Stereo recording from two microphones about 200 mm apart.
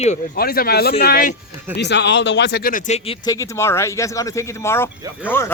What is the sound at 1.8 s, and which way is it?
Speech, 60° left (ahead or behind).